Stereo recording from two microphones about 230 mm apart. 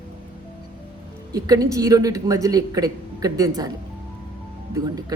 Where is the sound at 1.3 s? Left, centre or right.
Centre.